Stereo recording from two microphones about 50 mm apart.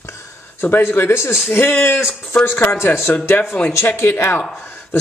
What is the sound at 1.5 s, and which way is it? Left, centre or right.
Speech, left.